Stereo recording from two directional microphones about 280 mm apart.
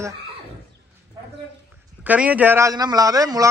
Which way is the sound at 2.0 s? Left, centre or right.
Centre.